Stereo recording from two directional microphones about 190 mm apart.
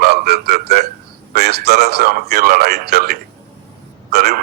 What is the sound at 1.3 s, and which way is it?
A man's voice, 55° right (ahead or behind).